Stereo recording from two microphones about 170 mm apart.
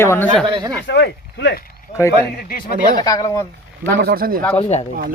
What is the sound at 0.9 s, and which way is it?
Speech, 90° left.